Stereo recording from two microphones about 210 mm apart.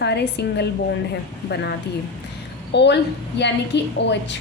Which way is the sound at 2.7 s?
55° left (ahead or behind).